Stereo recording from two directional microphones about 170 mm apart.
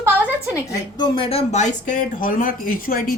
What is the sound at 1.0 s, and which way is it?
Speech, 35° left (ahead or behind).